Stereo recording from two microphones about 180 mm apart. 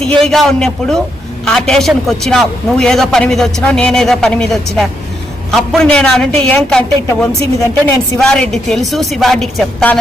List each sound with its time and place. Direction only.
0.0 s a man's voice: centre (ahead or behind)
7.3 s a woman's voice: 15° left (ahead or behind)
8.2 s a man's voice: centre (ahead or behind)